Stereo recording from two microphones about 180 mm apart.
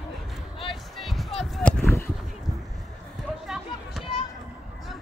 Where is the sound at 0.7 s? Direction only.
Centre (ahead or behind).